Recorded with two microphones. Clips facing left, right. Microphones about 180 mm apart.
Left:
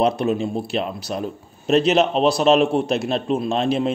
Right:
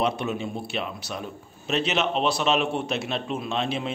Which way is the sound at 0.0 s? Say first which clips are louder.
Left 7 dB; 35° left (ahead or behind).